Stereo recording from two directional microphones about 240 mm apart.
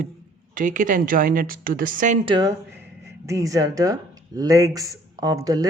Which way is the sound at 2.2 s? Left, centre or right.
Centre.